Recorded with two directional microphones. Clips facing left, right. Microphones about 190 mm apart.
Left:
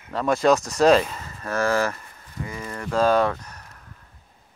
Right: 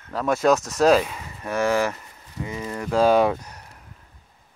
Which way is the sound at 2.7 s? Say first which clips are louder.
Right 2 dB; 10° right (ahead or behind).